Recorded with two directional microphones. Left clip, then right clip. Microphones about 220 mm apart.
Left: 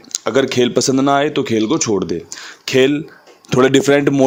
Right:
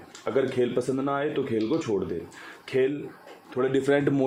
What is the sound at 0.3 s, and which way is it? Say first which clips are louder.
Speech: left 10 dB; 55° left (ahead or behind).